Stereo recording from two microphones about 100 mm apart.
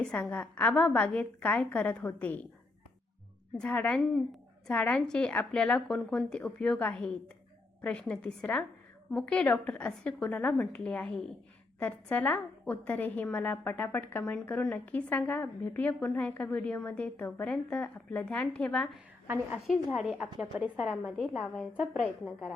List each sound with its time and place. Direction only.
0.0 s a woman's voice: 10° left (ahead or behind)
3.6 s a woman's voice: 10° left (ahead or behind)
19.9 s a woman's voice: 10° right (ahead or behind)
21.0 s a woman's voice: centre (ahead or behind)